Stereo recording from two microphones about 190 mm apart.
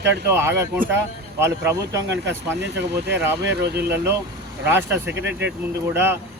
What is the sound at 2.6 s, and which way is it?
Speech, 65° right (ahead or behind).